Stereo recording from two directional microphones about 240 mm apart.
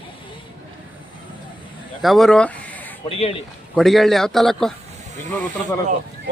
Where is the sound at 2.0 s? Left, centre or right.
Centre.